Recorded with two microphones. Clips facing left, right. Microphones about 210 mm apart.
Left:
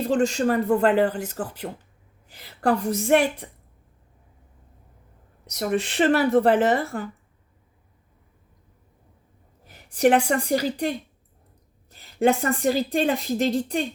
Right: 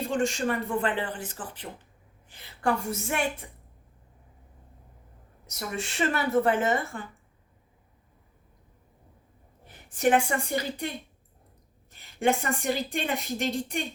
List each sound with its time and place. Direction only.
0.1 s a woman's voice: 35° left (ahead or behind)
5.5 s a woman's voice: 35° left (ahead or behind)
9.9 s a woman's voice: 35° left (ahead or behind)